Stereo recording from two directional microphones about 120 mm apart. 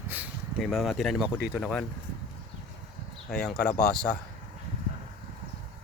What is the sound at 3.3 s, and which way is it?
Speech, 5° left (ahead or behind).